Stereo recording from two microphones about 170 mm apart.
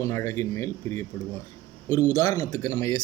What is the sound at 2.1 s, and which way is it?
Speech, 25° left (ahead or behind).